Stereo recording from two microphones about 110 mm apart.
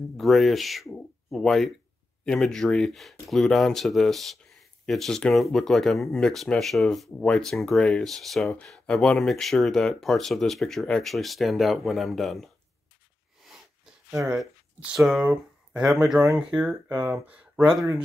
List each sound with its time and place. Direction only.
0.2 s speech: centre (ahead or behind)
13.4 s a sound: centre (ahead or behind)
14.1 s speech: 25° right (ahead or behind)
15.0 s speech: 5° right (ahead or behind)
16.9 s speech: 20° right (ahead or behind)